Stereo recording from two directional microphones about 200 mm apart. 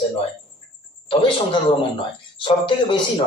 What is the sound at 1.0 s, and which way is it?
Speech, 25° left (ahead or behind).